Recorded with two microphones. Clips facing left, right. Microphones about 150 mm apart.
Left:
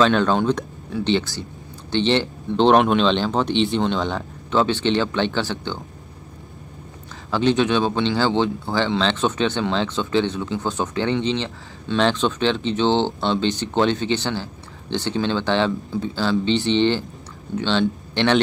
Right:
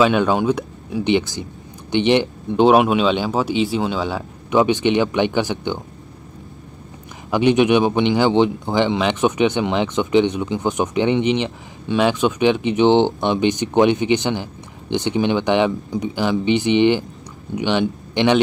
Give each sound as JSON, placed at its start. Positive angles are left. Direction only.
{"t": 0.0, "sound": "a man's voice", "side_deg": -10}
{"t": 7.2, "sound": "a man's voice", "side_deg": -15}